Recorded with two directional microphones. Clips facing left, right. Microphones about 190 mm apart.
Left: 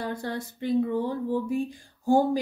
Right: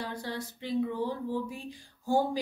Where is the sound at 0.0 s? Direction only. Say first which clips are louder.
Left 5 dB; 50° left (ahead or behind).